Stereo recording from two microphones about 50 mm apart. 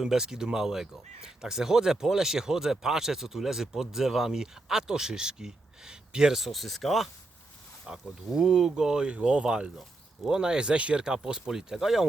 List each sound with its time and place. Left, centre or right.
0.0 s speech: centre
6.3 s speech: centre
7.9 s speech: centre